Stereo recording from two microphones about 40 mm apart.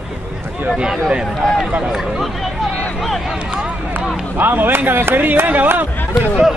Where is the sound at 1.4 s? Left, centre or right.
Centre.